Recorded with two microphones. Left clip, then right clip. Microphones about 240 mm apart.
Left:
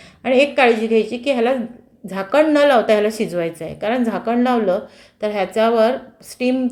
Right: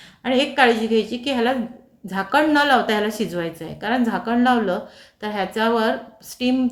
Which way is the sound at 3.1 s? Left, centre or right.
Right.